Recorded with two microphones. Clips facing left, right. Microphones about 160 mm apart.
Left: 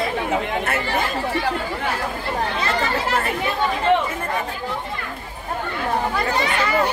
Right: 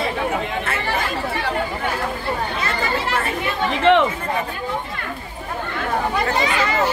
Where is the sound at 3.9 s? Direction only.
80° right.